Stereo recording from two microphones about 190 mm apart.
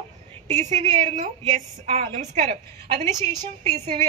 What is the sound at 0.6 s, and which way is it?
Speech, 40° right (ahead or behind).